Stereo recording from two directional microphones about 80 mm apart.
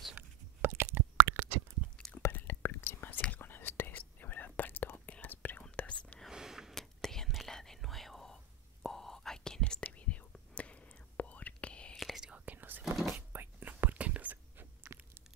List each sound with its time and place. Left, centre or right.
0.1 s a sound: right
2.0 s whispering: centre
2.3 s whispering: left
6.3 s a sound: centre
6.8 s whispering: centre
12.2 s whispering: centre